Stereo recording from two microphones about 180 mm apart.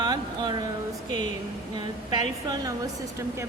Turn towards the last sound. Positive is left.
turn(degrees=-15)  # may be behind; listen again after turning